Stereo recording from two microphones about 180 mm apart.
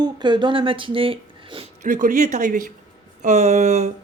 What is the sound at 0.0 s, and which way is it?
Speech, 25° right (ahead or behind).